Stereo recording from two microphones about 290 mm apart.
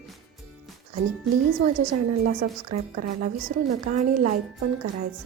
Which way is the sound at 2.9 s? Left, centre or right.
Right.